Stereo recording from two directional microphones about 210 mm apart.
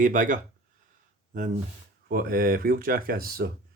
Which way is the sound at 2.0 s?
45° right (ahead or behind).